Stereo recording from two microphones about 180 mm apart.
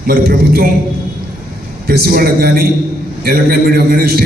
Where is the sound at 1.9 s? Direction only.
55° right (ahead or behind).